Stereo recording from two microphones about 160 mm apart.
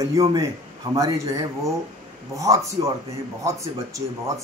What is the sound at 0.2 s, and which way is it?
A man's voice, 20° right (ahead or behind).